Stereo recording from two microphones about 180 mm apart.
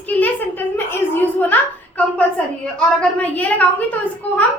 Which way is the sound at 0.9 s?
10° left (ahead or behind).